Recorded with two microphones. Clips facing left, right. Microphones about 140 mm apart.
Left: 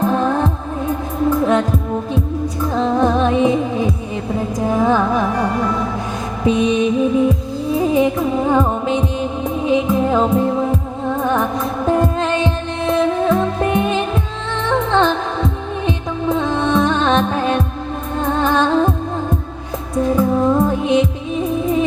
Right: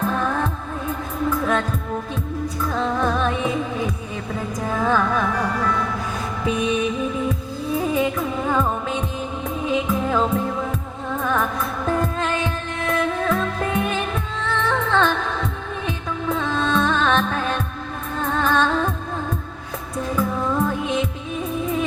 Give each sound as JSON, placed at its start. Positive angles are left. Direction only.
{"t": 0.0, "sound": "music", "side_deg": 25}
{"t": 20.1, "sound": "music", "side_deg": 30}